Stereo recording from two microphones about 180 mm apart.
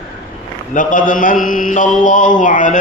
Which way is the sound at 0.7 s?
45° left (ahead or behind).